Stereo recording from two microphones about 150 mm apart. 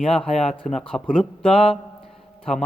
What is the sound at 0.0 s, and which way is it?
A man's voice, 5° left (ahead or behind).